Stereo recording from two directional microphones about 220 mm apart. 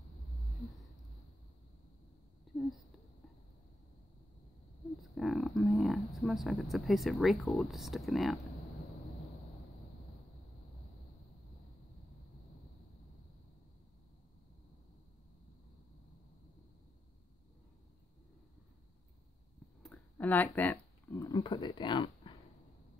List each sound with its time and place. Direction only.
2.5 s a sound: centre (ahead or behind)
5.0 s speech: centre (ahead or behind)
19.8 s speech: 5° left (ahead or behind); by 22.3 s 20° left (ahead or behind)